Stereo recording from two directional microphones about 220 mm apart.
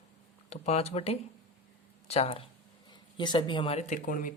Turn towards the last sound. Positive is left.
turn(degrees=40)  # may be behind; listen again after turning